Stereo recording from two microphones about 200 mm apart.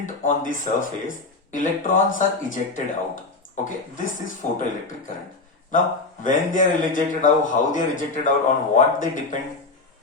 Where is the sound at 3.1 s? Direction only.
40° left (ahead or behind).